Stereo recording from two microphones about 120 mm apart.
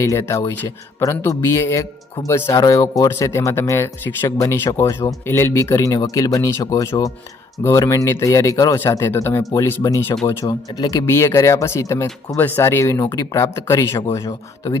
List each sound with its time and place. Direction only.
0.0 s speech: 25° left (ahead or behind)